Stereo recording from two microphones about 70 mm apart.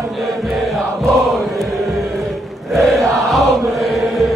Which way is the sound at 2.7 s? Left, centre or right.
Centre.